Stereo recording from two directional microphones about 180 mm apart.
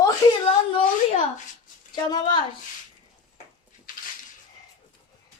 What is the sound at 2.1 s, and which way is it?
Speech, 25° left (ahead or behind).